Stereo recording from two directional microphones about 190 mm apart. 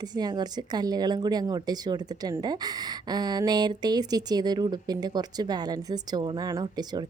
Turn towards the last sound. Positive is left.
turn(degrees=-20)  # may be behind; listen again after turning